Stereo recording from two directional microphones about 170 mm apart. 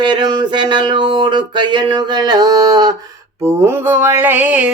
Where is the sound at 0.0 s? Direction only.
25° right (ahead or behind).